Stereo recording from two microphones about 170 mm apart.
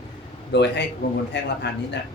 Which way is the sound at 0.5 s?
90° left.